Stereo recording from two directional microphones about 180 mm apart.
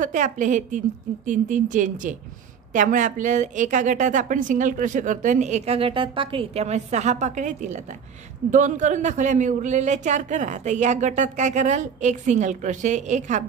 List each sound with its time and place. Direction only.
0.0 s a woman's voice: 45° right (ahead or behind)